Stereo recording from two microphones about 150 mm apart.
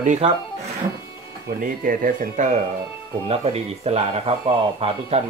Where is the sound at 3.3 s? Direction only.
45° right (ahead or behind).